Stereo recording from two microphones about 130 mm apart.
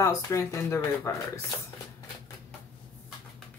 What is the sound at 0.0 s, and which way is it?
Speech, 25° left (ahead or behind).